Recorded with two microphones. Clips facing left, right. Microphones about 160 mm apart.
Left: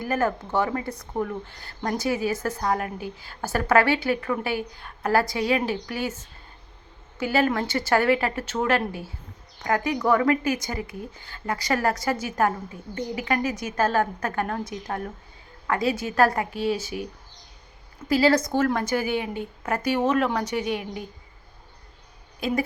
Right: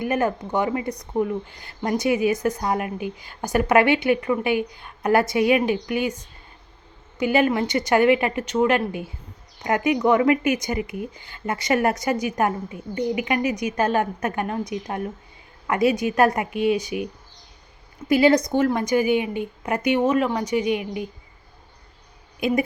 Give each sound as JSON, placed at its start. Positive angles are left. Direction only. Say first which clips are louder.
{"t": 0.0, "sound": "a woman's voice", "louder": "right 2 dB", "side_deg": -15}
{"t": 7.3, "sound": "a woman's voice", "louder": "right 2 dB", "side_deg": -15}
{"t": 18.1, "sound": "a woman's voice", "louder": "right 3 dB", "side_deg": -20}
{"t": 20.1, "sound": "a woman's voice", "louder": "right 2 dB", "side_deg": -5}